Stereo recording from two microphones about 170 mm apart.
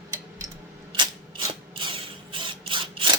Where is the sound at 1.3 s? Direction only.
30° right (ahead or behind).